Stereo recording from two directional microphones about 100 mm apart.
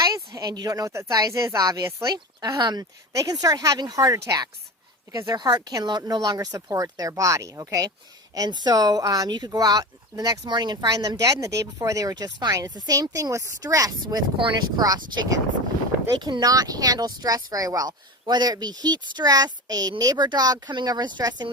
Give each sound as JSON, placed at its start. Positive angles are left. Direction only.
{"t": 0.3, "sound": "speech", "side_deg": -40}
{"t": 8.4, "sound": "speech", "side_deg": -45}
{"t": 14.3, "sound": "speech", "side_deg": -60}
{"t": 14.8, "sound": "speech", "side_deg": -45}